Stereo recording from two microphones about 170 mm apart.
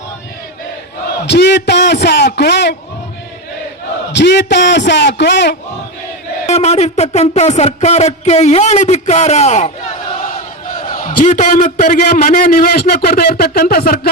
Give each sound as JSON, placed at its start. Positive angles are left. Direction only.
{"t": 1.2, "sound": "a man's voice", "side_deg": 90}
{"t": 4.1, "sound": "a man's voice", "side_deg": 90}
{"t": 6.4, "sound": "a sound", "side_deg": 40}
{"t": 10.9, "sound": "a man's voice", "side_deg": 55}